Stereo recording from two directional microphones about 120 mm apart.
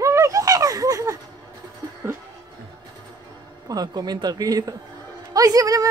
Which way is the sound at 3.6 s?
30° right (ahead or behind).